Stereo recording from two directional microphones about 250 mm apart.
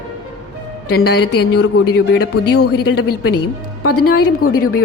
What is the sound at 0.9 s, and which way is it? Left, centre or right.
Speech, left.